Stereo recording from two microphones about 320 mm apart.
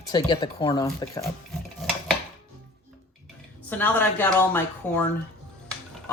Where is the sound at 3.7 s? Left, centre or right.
Centre.